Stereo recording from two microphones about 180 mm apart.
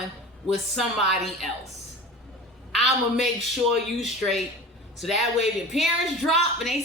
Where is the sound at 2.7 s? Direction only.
Centre (ahead or behind).